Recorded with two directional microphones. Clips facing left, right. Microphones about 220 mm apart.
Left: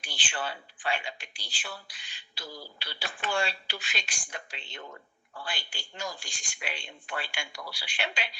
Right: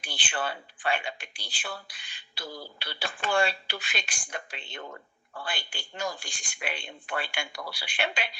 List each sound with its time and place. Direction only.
0.0 s speech: 55° right (ahead or behind)